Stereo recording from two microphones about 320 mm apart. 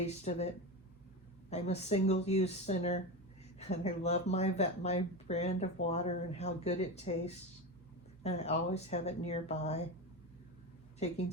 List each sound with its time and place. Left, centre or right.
0.0 s speech: centre
1.5 s speech: centre
11.0 s speech: centre